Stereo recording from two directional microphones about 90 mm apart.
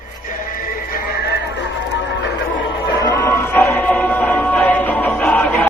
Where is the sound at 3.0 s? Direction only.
30° left (ahead or behind).